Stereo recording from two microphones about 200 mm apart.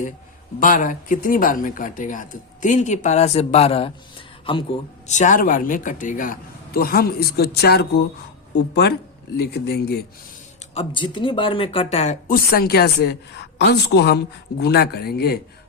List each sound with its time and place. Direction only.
0.6 s speech: 40° left (ahead or behind)
5.0 s a man's voice: 35° left (ahead or behind); by 10.1 s 50° left (ahead or behind)
10.8 s speech: 25° left (ahead or behind)
12.3 s a woman's voice: 50° left (ahead or behind)